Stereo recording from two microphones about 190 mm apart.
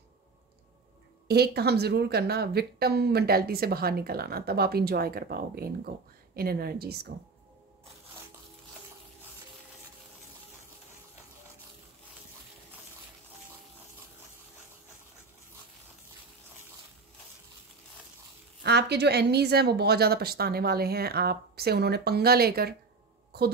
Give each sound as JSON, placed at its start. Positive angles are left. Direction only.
{"t": 1.2, "sound": "speech", "side_deg": -55}
{"t": 18.6, "sound": "speech", "side_deg": -60}